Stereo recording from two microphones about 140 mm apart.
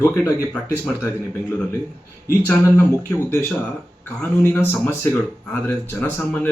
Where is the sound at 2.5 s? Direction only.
15° left (ahead or behind).